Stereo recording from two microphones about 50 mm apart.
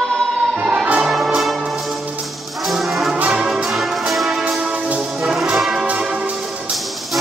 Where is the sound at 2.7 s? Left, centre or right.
Centre.